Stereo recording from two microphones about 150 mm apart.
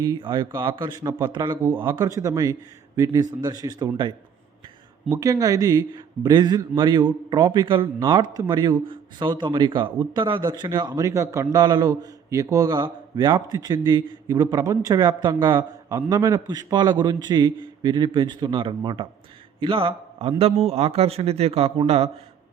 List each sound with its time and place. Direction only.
0.0 s a man's voice: 30° right (ahead or behind)